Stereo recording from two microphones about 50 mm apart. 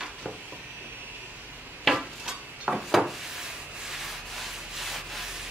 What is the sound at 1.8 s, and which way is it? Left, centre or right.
Dishes, centre.